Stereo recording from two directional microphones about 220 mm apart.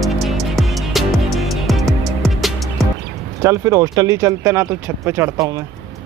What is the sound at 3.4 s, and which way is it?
Speech, 10° right (ahead or behind).